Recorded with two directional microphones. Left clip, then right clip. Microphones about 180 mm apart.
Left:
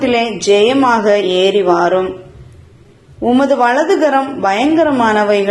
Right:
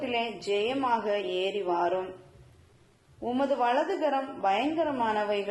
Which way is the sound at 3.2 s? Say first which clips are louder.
Left 16 dB; 30° left (ahead or behind).